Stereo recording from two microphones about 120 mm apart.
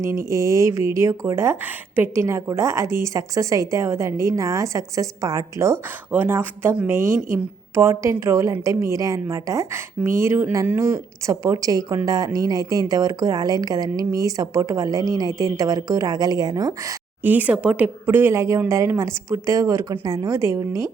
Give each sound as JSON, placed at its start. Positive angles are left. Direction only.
{"t": 0.0, "sound": "a woman's voice", "side_deg": -25}
{"t": 17.2, "sound": "speech", "side_deg": -15}